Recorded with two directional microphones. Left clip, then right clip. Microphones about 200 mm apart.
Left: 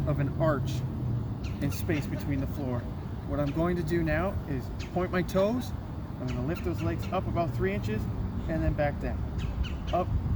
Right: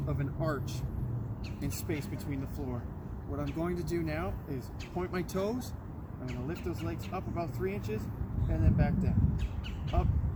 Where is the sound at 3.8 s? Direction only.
30° left (ahead or behind).